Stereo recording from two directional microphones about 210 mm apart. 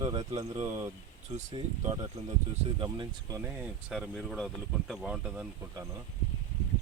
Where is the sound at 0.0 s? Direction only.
20° right (ahead or behind).